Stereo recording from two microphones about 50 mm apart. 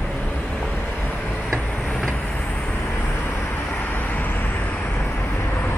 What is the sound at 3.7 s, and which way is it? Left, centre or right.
Vehicle, left.